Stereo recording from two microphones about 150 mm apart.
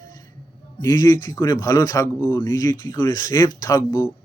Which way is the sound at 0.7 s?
25° left (ahead or behind).